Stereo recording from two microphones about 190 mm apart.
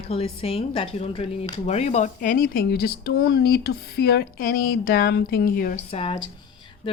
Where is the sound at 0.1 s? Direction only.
30° left (ahead or behind); by 5.7 s 50° left (ahead or behind).